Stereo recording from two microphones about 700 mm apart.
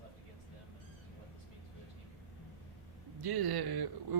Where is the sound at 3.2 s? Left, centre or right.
Right.